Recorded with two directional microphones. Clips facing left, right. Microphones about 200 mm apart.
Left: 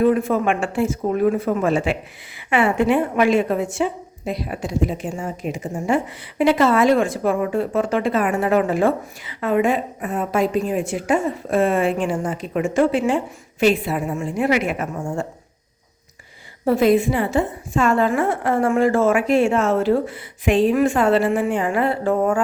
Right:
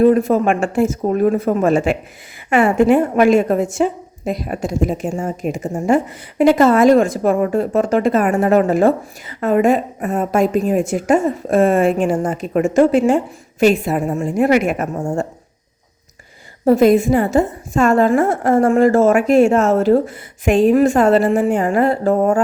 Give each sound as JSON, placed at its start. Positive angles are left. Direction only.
{"t": 0.0, "sound": "a woman's voice", "side_deg": -40}
{"t": 16.6, "sound": "a woman's voice", "side_deg": -45}